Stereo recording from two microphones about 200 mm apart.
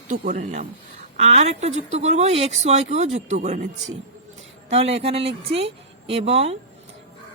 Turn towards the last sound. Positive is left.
turn(degrees=-30)  # may be behind; listen again after turning